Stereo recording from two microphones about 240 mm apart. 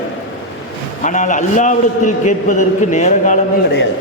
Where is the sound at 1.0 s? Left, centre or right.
Left.